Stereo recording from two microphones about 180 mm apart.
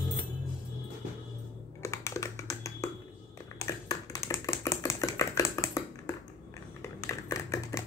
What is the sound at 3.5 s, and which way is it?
Typing, 20° left (ahead or behind).